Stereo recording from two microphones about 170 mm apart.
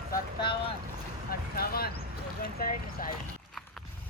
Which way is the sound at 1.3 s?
65° left (ahead or behind).